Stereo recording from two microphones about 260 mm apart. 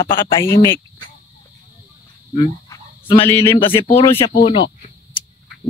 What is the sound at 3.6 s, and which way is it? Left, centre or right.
Speech, left.